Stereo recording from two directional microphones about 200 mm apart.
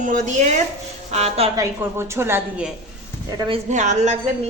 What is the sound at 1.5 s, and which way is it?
A woman's voice, 15° right (ahead or behind).